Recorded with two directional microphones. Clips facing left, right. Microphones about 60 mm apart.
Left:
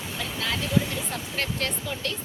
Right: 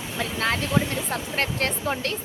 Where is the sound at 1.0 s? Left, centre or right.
Right.